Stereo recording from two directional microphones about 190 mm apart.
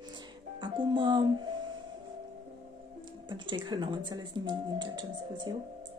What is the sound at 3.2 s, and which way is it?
Speech, 25° right (ahead or behind).